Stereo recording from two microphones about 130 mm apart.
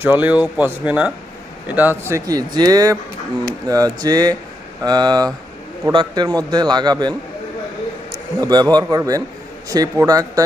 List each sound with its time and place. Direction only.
0.0 s a man's voice: 15° right (ahead or behind); by 7.1 s 35° right (ahead or behind)
8.4 s a man's voice: 30° right (ahead or behind)